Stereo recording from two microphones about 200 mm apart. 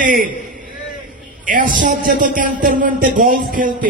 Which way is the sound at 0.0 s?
45° right (ahead or behind).